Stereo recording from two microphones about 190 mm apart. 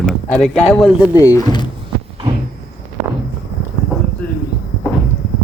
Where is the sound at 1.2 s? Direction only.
20° left (ahead or behind).